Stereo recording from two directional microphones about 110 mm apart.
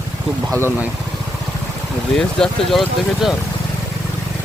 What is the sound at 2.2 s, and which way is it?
Speech, 5° left (ahead or behind).